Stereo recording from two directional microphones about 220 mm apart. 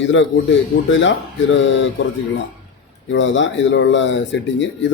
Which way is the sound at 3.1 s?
55° left (ahead or behind).